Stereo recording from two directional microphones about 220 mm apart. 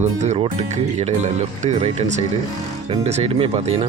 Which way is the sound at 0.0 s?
30° right (ahead or behind).